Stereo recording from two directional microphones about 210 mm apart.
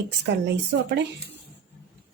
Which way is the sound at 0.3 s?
55° right (ahead or behind).